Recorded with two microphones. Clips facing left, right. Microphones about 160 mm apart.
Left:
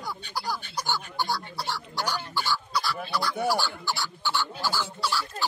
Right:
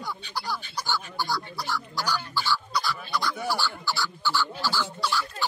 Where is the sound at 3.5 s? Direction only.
20° left (ahead or behind).